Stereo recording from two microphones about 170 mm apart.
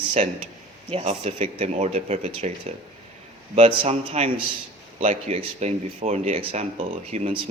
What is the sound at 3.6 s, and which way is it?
Speech, 40° right (ahead or behind).